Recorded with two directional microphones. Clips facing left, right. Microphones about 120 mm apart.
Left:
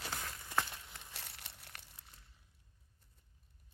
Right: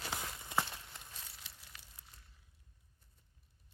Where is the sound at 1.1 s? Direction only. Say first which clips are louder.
Left 2 dB; 70° left (ahead or behind).